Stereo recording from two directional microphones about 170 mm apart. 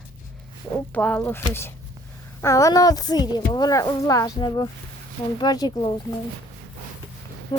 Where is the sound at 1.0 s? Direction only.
10° left (ahead or behind).